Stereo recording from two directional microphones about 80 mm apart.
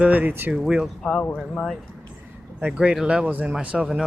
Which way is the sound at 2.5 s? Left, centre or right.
Centre.